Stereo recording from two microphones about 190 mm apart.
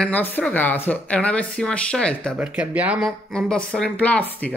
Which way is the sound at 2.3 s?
5° right (ahead or behind).